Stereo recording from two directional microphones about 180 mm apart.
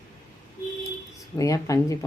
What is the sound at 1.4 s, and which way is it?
Speech, 20° left (ahead or behind).